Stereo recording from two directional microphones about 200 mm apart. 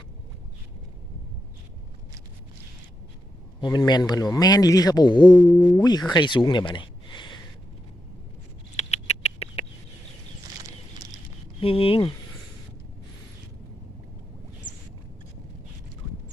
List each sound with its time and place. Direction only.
3.6 s speech: 20° left (ahead or behind)
5.3 s speech: 5° left (ahead or behind)
5.7 s speech: 20° left (ahead or behind)
8.7 s rodents: 35° left (ahead or behind)
11.6 s speech: 30° left (ahead or behind)